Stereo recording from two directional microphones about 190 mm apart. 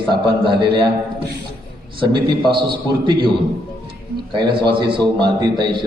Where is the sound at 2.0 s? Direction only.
25° right (ahead or behind).